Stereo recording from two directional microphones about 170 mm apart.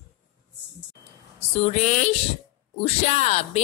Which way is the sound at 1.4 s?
40° left (ahead or behind).